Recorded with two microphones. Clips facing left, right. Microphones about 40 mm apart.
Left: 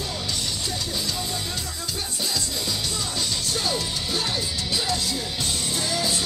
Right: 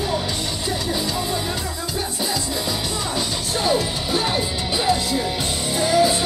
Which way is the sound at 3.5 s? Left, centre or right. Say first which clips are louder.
Right 10 dB; right.